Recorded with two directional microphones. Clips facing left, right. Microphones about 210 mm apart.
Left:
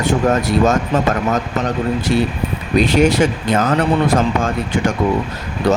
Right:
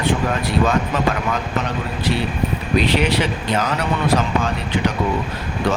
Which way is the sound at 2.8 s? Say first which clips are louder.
Left 7 dB; 45° left (ahead or behind).